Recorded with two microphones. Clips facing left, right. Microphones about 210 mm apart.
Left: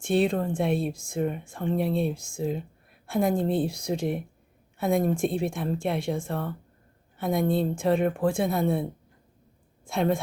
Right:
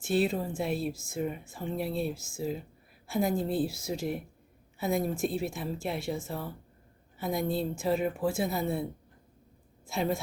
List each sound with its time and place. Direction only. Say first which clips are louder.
0.0 s speech: left 4 dB; 5° right (ahead or behind)
6.3 s a woman's voice: left 6 dB; 65° left (ahead or behind)
7.8 s speech: left 5 dB; 5° right (ahead or behind)
9.8 s a woman's voice: left 5 dB; centre (ahead or behind)